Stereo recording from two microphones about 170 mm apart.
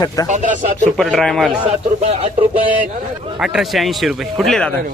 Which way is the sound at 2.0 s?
40° right (ahead or behind).